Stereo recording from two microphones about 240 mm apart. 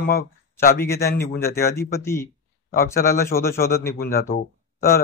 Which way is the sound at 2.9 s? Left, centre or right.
Left.